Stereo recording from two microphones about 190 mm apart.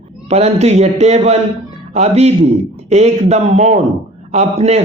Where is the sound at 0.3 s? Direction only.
35° right (ahead or behind).